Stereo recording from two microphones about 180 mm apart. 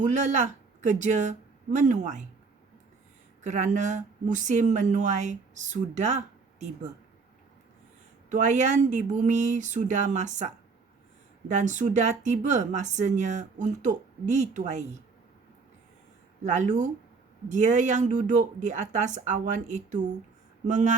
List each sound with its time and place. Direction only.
0.0 s speech: 40° right (ahead or behind)
3.4 s speech: 40° right (ahead or behind)
8.3 s speech: 45° right (ahead or behind)
16.4 s speech: 40° right (ahead or behind)